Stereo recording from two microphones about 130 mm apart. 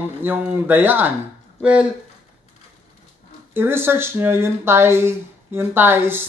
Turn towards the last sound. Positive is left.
turn(degrees=-15)  # may be behind; listen again after turning